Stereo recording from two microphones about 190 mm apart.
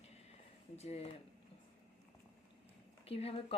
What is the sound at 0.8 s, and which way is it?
Speech, 35° left (ahead or behind).